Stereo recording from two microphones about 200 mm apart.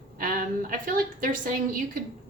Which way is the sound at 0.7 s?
40° right (ahead or behind).